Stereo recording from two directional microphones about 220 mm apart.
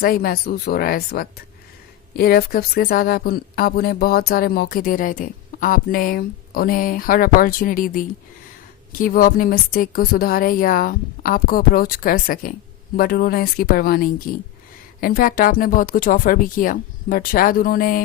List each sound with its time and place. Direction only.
0.0 s speech: 40° left (ahead or behind)